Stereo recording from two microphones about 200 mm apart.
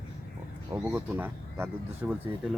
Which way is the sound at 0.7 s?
15° right (ahead or behind).